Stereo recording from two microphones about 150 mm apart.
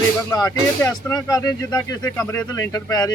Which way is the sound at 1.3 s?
25° left (ahead or behind).